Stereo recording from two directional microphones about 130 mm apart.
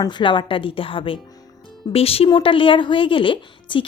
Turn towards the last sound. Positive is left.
turn(degrees=40)  # may be behind; listen again after turning